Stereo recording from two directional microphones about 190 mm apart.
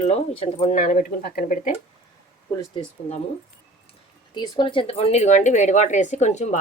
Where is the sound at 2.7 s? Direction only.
30° left (ahead or behind).